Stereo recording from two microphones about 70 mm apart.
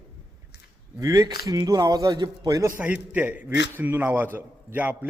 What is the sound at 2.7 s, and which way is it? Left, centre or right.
A man's voice, right.